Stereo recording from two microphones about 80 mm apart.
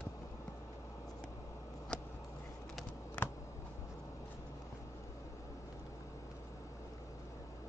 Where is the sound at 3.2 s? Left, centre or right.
Centre.